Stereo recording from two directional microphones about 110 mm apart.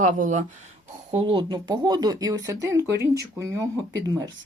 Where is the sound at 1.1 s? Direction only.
50° right (ahead or behind).